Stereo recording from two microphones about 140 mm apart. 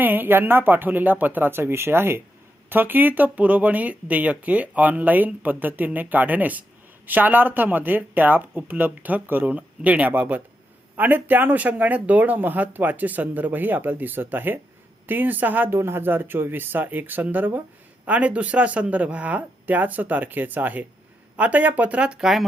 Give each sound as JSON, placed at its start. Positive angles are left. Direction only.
{"t": 0.0, "sound": "speech", "side_deg": -15}